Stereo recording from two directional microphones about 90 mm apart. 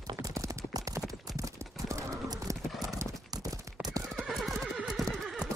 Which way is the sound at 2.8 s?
40° right (ahead or behind).